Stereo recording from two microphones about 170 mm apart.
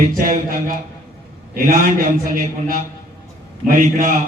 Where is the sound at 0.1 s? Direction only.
50° right (ahead or behind).